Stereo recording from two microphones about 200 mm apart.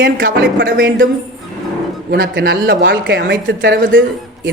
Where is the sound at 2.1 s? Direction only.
60° right (ahead or behind).